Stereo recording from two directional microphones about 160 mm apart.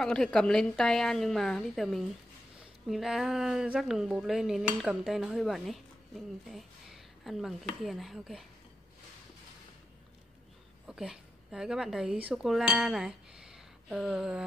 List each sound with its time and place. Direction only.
0.0 s dishes: 5° left (ahead or behind)
10.9 s speech: 5° right (ahead or behind)